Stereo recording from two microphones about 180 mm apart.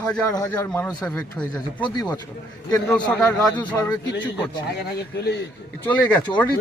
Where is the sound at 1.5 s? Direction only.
25° left (ahead or behind).